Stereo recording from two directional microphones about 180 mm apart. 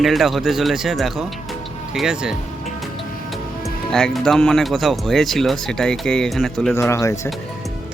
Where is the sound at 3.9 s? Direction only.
5° left (ahead or behind).